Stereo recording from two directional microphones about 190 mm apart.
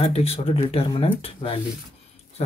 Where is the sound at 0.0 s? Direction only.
30° left (ahead or behind).